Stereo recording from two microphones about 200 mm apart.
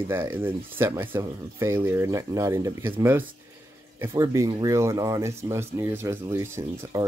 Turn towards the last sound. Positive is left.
turn(degrees=-15)  # may be behind; listen again after turning